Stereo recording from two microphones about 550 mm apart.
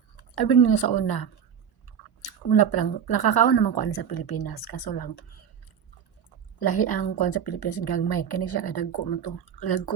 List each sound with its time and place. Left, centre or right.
0.2 s a woman's voice: left
2.5 s a woman's voice: left
6.6 s a woman's voice: left